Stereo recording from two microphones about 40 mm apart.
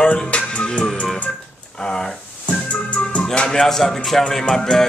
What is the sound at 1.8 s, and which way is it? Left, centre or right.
Speech, centre.